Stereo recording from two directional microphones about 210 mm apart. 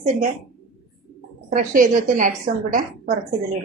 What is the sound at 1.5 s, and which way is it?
A woman's voice, 40° right (ahead or behind).